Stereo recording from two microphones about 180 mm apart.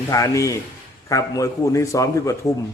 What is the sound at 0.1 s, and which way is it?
A man's voice, 20° left (ahead or behind).